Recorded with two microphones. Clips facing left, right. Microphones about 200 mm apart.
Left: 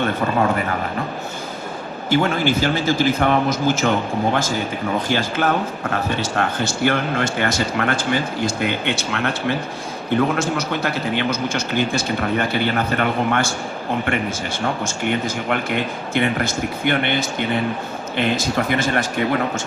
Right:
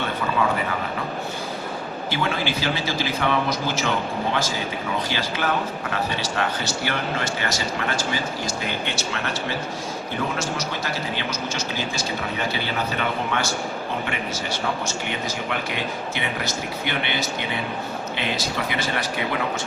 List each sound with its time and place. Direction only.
0.0 s speech: 50° left (ahead or behind)
2.0 s a man's voice: 45° left (ahead or behind)
14.8 s speech: 50° left (ahead or behind)